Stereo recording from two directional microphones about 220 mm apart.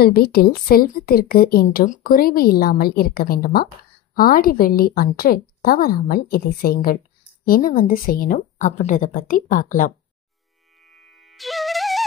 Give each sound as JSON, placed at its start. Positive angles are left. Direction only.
{"t": 0.0, "sound": "a woman's voice", "side_deg": 45}
{"t": 10.8, "sound": "music", "side_deg": 0}